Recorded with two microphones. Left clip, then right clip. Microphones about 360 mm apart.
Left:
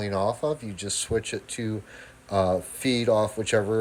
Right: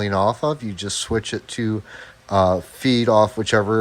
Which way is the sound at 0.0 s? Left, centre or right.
Centre.